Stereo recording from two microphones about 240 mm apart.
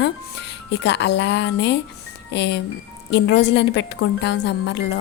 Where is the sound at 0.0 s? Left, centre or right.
Left.